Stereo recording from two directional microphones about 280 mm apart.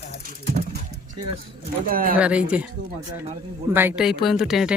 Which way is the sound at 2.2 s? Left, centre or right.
Centre.